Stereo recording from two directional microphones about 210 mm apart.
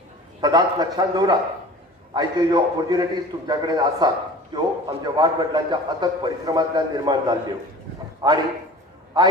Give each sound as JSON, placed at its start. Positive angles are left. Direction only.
{"t": 0.4, "sound": "a man's voice", "side_deg": -20}